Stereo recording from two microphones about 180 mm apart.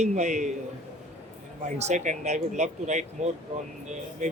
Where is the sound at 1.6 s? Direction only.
40° right (ahead or behind).